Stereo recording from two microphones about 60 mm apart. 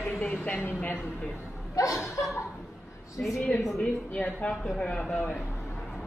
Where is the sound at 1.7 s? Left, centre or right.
Left.